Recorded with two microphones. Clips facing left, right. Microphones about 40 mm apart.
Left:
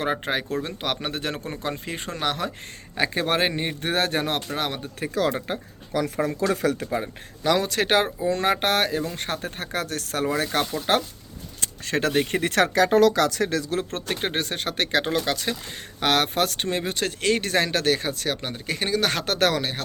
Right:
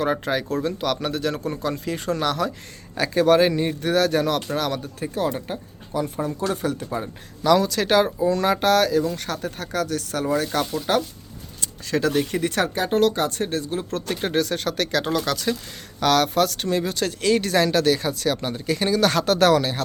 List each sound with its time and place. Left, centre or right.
0.0 s speech: left
5.1 s speech: left
7.0 s speech: left
13.9 s speech: left
16.0 s speech: left; by 19.8 s centre